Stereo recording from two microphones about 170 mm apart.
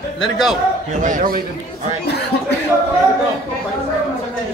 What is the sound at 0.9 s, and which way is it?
Speech, 50° right (ahead or behind).